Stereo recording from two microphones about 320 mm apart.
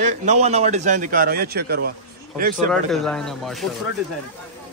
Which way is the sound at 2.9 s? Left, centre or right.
Centre.